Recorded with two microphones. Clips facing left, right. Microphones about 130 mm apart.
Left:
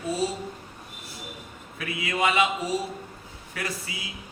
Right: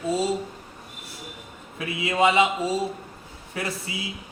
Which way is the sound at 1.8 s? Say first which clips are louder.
Right 5 dB; 25° right (ahead or behind).